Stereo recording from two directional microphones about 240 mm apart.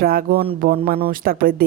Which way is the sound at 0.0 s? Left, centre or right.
Right.